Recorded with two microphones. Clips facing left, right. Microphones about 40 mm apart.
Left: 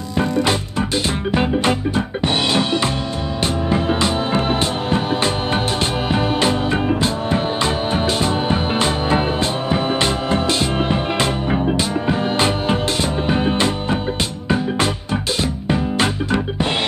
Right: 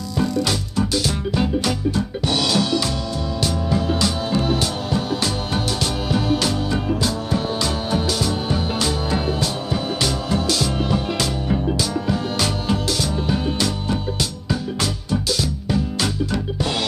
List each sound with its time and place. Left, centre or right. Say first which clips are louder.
0.2 s music: left 3 dB; left
15.4 s music: left 3 dB; left